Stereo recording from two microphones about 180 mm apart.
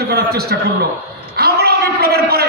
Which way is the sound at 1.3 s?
60° right (ahead or behind).